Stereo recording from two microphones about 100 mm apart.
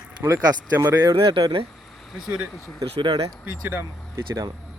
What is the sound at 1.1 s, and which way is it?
Speech, 60° right (ahead or behind).